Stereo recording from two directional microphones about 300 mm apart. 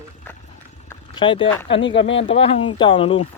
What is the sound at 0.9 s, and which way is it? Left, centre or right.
Clip-clop, centre.